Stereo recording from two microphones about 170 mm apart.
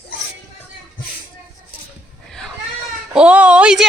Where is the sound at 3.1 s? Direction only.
5° right (ahead or behind).